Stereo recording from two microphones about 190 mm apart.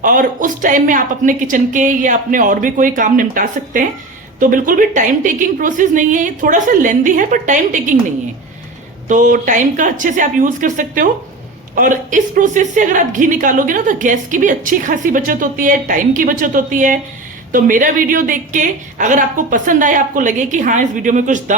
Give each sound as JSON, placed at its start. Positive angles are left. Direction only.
{"t": 0.0, "sound": "a woman's voice", "side_deg": -45}
{"t": 9.0, "sound": "a woman's voice", "side_deg": -45}